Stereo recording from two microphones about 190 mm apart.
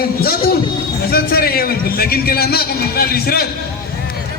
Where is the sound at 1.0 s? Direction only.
55° left (ahead or behind).